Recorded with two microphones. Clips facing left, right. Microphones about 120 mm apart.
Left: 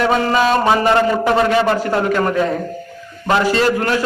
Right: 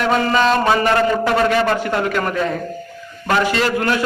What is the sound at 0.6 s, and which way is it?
A man's voice, 20° left (ahead or behind).